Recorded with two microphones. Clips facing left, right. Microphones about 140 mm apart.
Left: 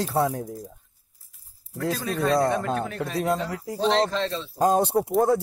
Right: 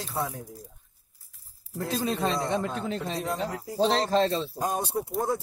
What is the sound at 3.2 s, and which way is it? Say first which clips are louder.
Speech: left 5 dB; 90° left.